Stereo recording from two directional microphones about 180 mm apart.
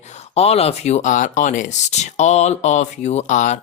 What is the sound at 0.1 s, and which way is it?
Speech, 35° left (ahead or behind).